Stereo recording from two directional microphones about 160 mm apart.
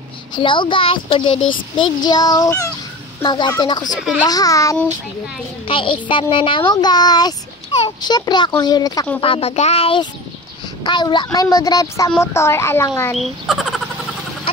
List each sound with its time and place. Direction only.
0.3 s speech: 30° left (ahead or behind)
5.7 s speech: 35° left (ahead or behind)
9.2 s speech: 35° left (ahead or behind); by 13.1 s 15° left (ahead or behind)
13.1 s speech: centre (ahead or behind)